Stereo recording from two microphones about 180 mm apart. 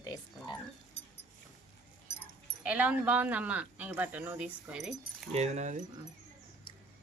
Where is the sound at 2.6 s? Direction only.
5° right (ahead or behind).